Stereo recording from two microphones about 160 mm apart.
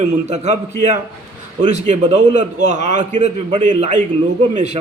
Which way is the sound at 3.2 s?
35° right (ahead or behind).